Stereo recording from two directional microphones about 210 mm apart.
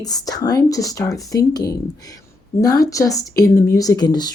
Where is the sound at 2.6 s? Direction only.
15° left (ahead or behind).